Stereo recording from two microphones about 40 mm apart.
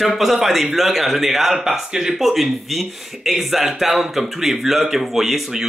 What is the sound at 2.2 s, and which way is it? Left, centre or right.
Speech, centre.